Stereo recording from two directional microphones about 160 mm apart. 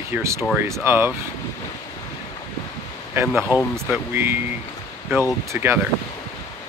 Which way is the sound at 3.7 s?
15° right (ahead or behind).